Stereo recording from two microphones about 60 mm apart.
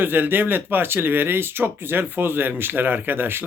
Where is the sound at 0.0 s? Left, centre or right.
Right.